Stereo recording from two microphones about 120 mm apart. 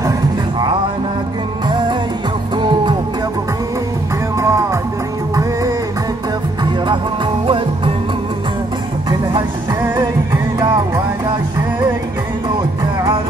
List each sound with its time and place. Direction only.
1.7 s music: 40° right (ahead or behind)
4.4 s music: 25° right (ahead or behind)
7.4 s music: 45° right (ahead or behind)
9.3 s music: 35° right (ahead or behind)